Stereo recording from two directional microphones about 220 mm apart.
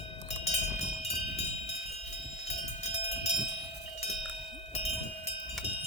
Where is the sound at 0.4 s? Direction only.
30° left (ahead or behind).